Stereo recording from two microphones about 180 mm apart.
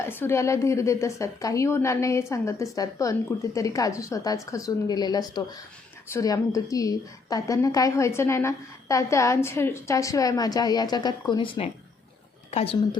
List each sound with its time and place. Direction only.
0.0 s a woman's voice: 10° left (ahead or behind); by 13.0 s 35° left (ahead or behind)